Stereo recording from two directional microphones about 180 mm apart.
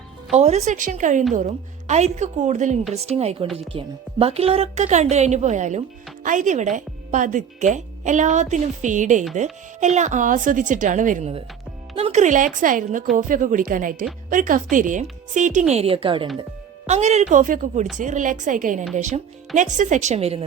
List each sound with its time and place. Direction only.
0.3 s a woman's voice: 35° right (ahead or behind)